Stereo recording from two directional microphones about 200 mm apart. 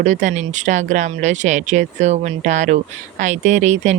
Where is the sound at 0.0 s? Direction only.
35° right (ahead or behind).